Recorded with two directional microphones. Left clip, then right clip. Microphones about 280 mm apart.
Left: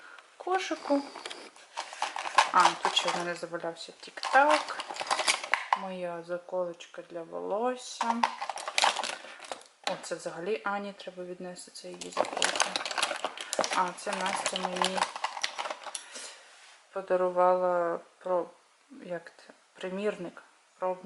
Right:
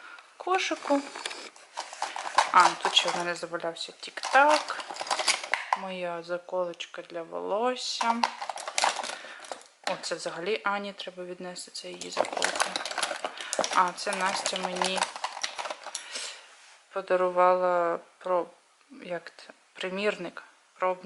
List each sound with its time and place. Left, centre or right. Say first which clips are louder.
0.3 s a sound: right 3 dB; centre
0.8 s speech: right 2 dB; centre
1.7 s horse: even; centre
2.4 s speech: right 2 dB; centre
14.8 s a sound: left 1 dB; centre
16.9 s speech: right 2 dB; centre